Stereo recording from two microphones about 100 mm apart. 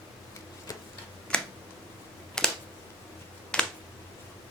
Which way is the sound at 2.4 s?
5° left (ahead or behind).